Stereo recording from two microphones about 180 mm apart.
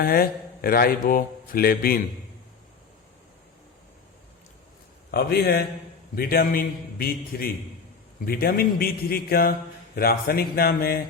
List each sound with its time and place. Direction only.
0.0 s a man's voice: 55° left (ahead or behind)
5.1 s a man's voice: 60° left (ahead or behind)